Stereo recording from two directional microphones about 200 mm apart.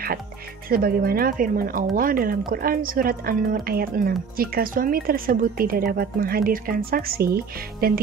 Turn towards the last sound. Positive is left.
turn(degrees=-50)  # may be behind; listen again after turning